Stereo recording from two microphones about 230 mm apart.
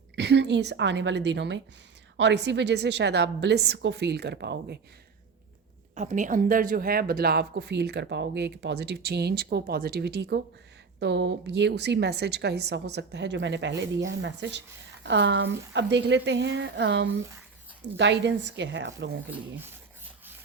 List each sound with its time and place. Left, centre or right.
0.2 s speech: right
5.9 s speech: right
19.3 s rub: centre